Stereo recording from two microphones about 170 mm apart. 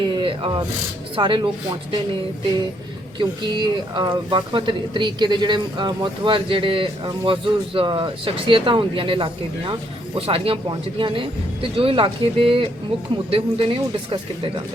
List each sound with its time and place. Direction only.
0.0 s a sound: 30° right (ahead or behind)
1.1 s speech: 30° right (ahead or behind)
3.2 s speech: 25° right (ahead or behind)